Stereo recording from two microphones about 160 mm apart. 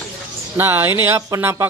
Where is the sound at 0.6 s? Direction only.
15° right (ahead or behind).